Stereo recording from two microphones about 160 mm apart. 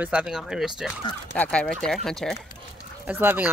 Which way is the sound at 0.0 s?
5° right (ahead or behind).